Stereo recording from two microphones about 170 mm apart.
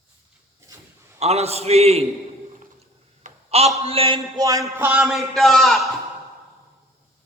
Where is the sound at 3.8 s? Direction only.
35° right (ahead or behind).